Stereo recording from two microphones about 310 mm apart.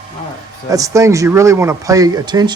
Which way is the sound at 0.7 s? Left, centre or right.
Centre.